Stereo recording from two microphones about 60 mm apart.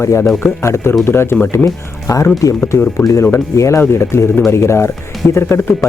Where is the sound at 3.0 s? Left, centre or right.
Left.